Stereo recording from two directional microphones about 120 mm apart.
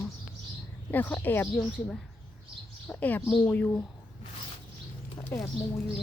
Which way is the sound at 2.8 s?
15° left (ahead or behind).